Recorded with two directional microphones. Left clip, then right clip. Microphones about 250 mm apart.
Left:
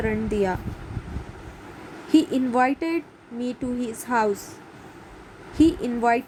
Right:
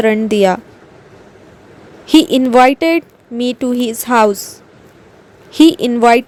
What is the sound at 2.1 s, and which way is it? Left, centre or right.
Speech, right.